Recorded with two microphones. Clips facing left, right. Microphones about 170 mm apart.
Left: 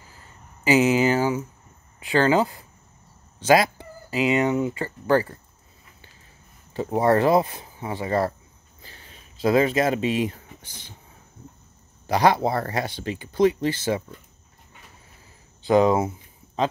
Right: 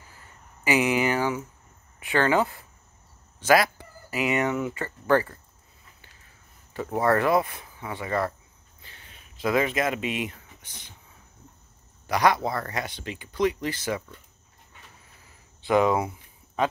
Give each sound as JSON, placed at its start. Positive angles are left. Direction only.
{"t": 0.7, "sound": "a sound", "side_deg": 20}
{"t": 2.0, "sound": "speech", "side_deg": 30}
{"t": 3.4, "sound": "speech", "side_deg": 25}
{"t": 6.7, "sound": "speech", "side_deg": 30}
{"t": 12.1, "sound": "speech", "side_deg": 30}
{"t": 15.6, "sound": "speech", "side_deg": 35}